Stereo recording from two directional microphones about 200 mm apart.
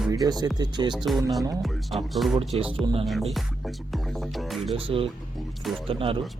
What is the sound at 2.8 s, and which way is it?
Speech, 25° right (ahead or behind).